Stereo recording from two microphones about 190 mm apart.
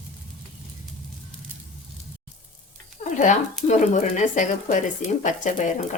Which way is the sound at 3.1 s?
40° left (ahead or behind).